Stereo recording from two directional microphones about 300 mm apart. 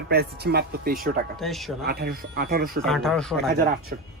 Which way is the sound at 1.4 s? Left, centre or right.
Centre.